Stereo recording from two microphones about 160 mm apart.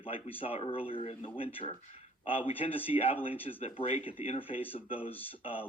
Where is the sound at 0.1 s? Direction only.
35° left (ahead or behind).